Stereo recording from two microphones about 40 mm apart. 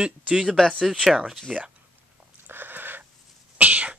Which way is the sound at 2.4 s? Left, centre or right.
Right.